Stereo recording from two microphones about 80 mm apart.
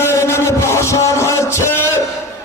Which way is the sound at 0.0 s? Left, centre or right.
Left.